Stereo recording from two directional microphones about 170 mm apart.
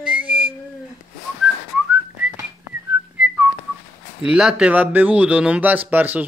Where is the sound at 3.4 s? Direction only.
5° right (ahead or behind).